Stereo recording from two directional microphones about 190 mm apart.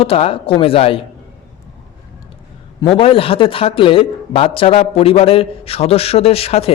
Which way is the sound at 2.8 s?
30° left (ahead or behind).